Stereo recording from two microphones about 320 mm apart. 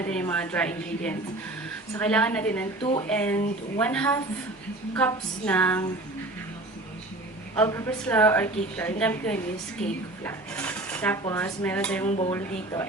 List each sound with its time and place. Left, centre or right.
0.0 s a woman's voice: centre
7.5 s a woman's voice: centre
12.0 s speech: left